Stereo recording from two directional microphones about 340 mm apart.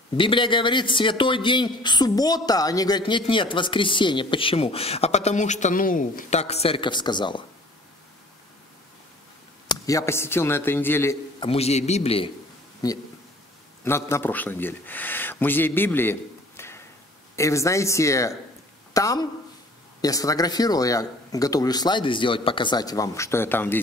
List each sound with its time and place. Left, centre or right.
0.2 s a man's voice: centre
9.7 s a man's voice: centre